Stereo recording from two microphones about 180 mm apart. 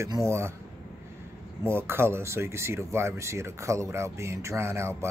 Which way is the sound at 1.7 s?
15° right (ahead or behind).